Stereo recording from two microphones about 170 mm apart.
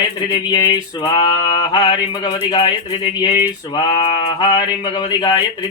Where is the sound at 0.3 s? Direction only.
25° left (ahead or behind).